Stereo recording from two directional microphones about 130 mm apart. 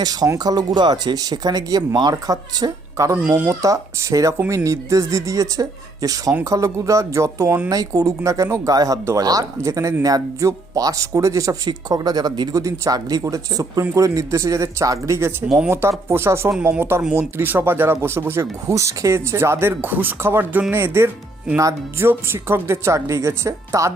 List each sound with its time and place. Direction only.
0.0 s speech: 30° right (ahead or behind)
3.2 s speech: 15° right (ahead or behind)
3.5 s speech: 25° right (ahead or behind)
15.4 s speech: centre (ahead or behind)
15.7 s speech: 20° right (ahead or behind)